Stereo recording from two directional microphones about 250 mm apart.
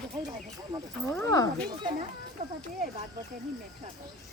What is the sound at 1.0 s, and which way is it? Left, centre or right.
Speech, centre.